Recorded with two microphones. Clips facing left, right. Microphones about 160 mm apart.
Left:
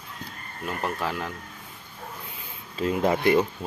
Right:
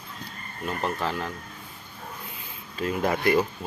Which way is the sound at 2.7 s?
25° left (ahead or behind).